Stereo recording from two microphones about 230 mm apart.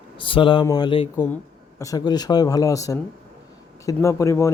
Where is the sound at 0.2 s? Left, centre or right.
Left.